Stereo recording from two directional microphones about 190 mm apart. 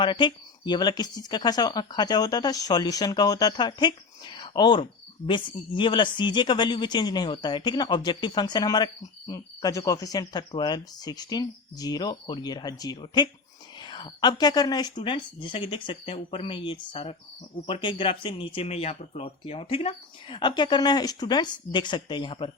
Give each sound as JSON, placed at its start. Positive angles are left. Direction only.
{"t": 0.0, "sound": "speech", "side_deg": 25}